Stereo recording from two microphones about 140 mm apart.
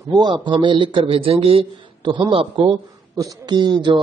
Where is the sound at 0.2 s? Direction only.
35° right (ahead or behind).